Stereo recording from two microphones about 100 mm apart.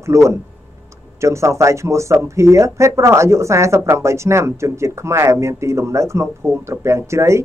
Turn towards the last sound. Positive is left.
turn(degrees=-30)  # may be behind; listen again after turning